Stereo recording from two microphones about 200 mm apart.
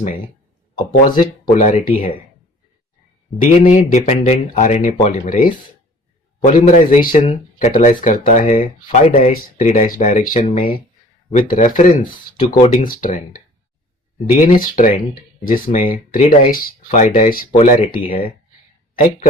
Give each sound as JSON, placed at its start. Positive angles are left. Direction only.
{"t": 1.2, "sound": "speech", "side_deg": 40}
{"t": 3.6, "sound": "speech", "side_deg": 40}